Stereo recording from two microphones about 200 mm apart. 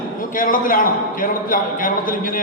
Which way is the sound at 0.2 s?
45° left (ahead or behind).